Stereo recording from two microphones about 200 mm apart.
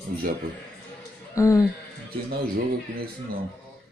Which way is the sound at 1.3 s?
15° left (ahead or behind).